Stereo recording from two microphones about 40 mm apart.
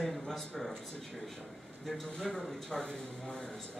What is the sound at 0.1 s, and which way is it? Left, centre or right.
Speech, centre.